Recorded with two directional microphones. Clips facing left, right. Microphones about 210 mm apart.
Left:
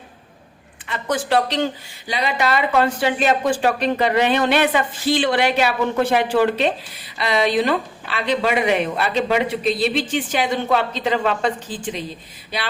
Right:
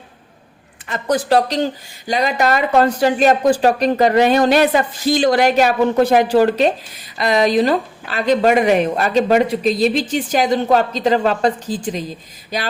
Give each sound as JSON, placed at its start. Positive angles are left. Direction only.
{"t": 0.9, "sound": "speech", "side_deg": -40}